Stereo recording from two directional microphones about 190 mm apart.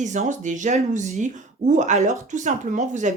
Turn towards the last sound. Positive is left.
turn(degrees=-40)  # may be behind; listen again after turning